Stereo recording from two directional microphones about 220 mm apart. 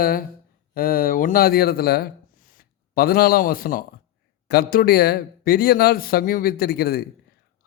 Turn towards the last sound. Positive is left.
turn(degrees=45)  # may be behind; listen again after turning